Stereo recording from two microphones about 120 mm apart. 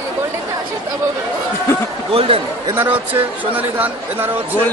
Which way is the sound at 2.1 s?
50° right (ahead or behind).